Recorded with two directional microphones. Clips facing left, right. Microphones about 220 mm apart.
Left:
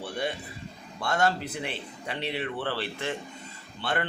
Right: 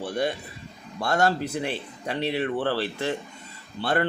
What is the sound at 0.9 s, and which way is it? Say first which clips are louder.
A man's voice: right 3 dB; 40° right (ahead or behind).